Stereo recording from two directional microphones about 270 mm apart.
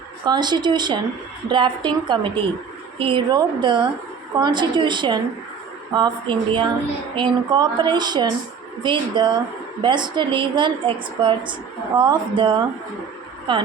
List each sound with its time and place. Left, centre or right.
0.3 s a woman's voice: centre